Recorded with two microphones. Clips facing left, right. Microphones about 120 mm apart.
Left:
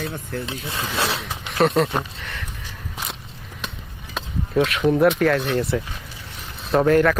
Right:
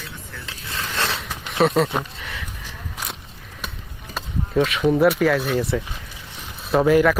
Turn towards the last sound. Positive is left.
turn(degrees=-5)  # may be behind; listen again after turning